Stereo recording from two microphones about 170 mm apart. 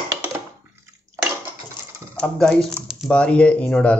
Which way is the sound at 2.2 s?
5° left (ahead or behind).